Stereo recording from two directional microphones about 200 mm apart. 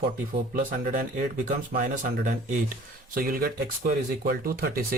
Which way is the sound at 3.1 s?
45° right (ahead or behind).